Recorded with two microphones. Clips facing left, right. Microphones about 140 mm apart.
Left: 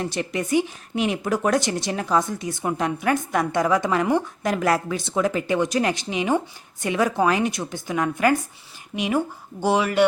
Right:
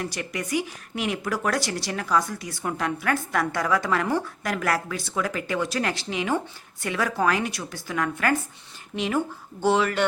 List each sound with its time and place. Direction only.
0.0 s speech: 25° left (ahead or behind)